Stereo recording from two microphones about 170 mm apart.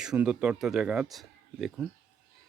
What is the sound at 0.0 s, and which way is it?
Speech, 5° right (ahead or behind).